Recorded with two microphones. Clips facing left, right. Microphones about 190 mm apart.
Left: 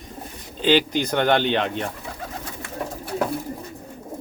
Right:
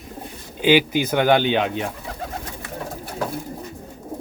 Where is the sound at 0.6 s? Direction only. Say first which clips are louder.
Right 2 dB; 10° right (ahead or behind).